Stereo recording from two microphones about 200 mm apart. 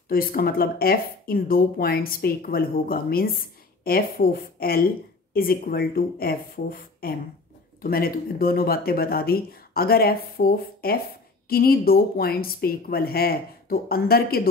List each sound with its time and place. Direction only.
0.1 s a woman's voice: 45° left (ahead or behind)